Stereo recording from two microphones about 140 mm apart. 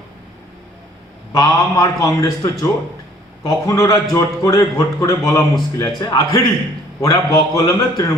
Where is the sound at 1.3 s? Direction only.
25° left (ahead or behind).